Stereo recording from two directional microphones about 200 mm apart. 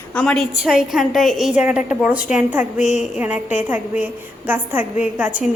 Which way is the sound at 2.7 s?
35° left (ahead or behind).